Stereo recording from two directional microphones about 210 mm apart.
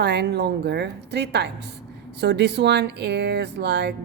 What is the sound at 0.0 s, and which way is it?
Speech, 55° right (ahead or behind).